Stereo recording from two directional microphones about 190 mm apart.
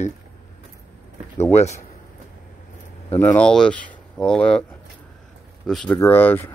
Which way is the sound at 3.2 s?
10° left (ahead or behind).